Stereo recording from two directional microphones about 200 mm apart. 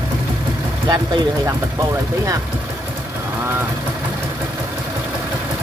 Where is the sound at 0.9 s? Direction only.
20° right (ahead or behind).